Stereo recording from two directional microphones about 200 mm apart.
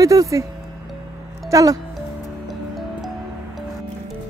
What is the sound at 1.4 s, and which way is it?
Speech, 15° right (ahead or behind).